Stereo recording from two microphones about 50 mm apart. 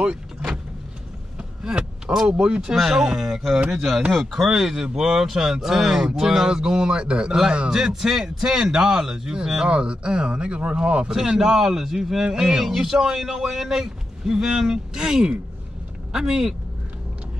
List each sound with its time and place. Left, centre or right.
1.6 s speech: centre
2.7 s a man's voice: centre
3.7 s a man's voice: centre